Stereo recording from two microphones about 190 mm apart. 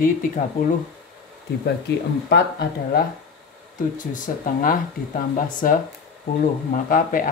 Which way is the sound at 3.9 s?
45° left (ahead or behind).